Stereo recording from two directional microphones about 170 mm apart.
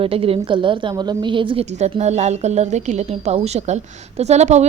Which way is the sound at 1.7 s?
40° right (ahead or behind).